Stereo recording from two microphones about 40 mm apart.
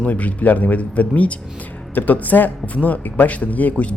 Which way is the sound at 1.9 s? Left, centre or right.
Left.